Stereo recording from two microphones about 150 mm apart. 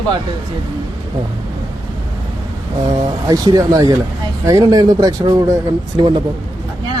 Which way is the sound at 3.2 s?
25° right (ahead or behind).